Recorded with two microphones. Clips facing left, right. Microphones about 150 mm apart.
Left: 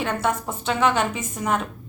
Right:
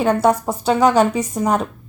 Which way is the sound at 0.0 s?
40° right (ahead or behind).